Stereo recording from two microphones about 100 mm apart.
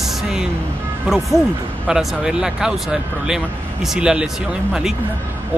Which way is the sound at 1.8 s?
5° right (ahead or behind).